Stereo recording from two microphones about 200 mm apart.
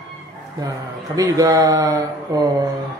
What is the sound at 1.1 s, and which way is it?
A man's voice, 15° right (ahead or behind).